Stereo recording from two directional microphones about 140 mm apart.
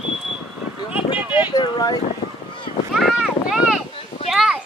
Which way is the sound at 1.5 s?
30° left (ahead or behind).